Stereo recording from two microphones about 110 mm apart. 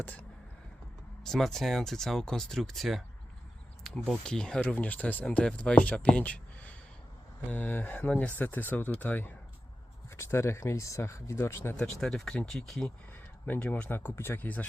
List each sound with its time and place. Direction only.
0.0 s speech: 15° left (ahead or behind)
1.2 s speech: 5° left (ahead or behind); by 11.8 s 20° left (ahead or behind)
11.8 s speech: 5° left (ahead or behind)
13.4 s speech: 15° left (ahead or behind)